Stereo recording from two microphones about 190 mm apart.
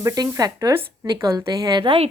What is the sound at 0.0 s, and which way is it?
A woman's voice, 20° right (ahead or behind).